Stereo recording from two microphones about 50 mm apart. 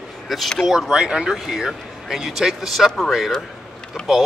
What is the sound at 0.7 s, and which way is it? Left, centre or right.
Speech, centre.